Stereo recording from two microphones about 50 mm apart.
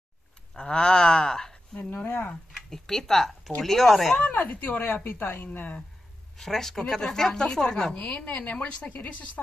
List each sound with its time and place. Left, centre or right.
0.6 s speech: centre
2.0 s speech: left
2.5 s speech: centre
4.2 s speech: left
6.3 s a woman's voice: centre
8.0 s a woman's voice: left